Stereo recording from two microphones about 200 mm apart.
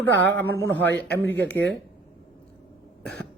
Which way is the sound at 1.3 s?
10° left (ahead or behind).